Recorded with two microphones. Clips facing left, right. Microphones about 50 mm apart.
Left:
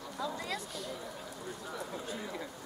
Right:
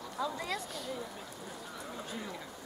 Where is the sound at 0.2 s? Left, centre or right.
Centre.